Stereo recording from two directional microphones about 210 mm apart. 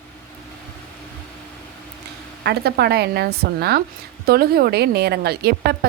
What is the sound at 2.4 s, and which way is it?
A woman's voice, 50° right (ahead or behind).